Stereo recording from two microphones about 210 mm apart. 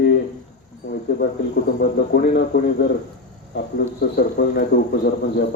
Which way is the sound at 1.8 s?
50° left (ahead or behind).